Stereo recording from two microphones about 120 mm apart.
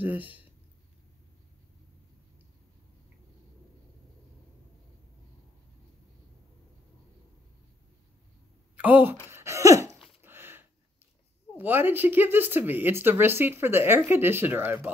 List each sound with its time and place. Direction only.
0.0 s speech: 15° right (ahead or behind)
8.7 s a woman's voice: 15° right (ahead or behind)
9.3 s a sound: 25° right (ahead or behind)
11.5 s speech: 15° right (ahead or behind)